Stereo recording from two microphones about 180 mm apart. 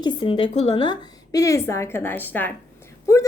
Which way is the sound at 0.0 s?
30° left (ahead or behind).